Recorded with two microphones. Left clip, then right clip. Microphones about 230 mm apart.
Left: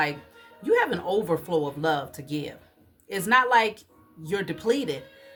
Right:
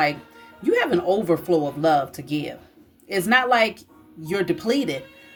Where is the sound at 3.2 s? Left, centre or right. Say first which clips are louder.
Right 1 dB; centre.